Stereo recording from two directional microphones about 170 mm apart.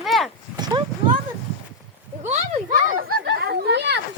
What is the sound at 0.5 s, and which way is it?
Clip-clop, 25° right (ahead or behind).